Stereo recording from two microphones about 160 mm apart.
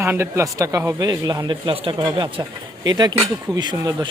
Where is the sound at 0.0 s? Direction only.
15° right (ahead or behind).